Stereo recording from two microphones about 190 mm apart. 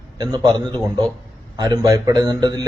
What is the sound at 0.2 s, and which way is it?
A man's voice, 25° right (ahead or behind).